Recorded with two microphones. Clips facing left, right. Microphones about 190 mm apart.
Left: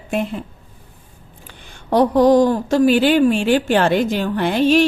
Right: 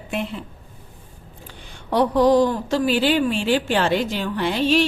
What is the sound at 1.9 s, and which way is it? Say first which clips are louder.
A woman's voice: left 4 dB; 45° left (ahead or behind).